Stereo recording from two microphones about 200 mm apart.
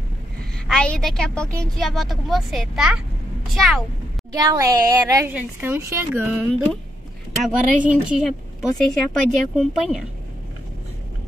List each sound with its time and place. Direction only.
0.7 s a woman's voice: 5° left (ahead or behind)
4.3 s a woman's voice: 20° right (ahead or behind)
7.8 s a woman's voice: 5° right (ahead or behind)